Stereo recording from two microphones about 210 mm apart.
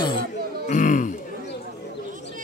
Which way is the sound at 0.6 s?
35° left (ahead or behind).